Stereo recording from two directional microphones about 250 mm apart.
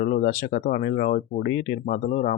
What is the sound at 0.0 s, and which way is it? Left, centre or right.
Speech, left.